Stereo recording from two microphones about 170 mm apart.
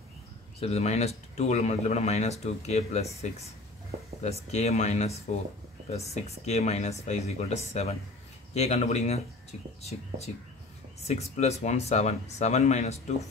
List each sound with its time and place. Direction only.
0.6 s speech: 40° left (ahead or behind)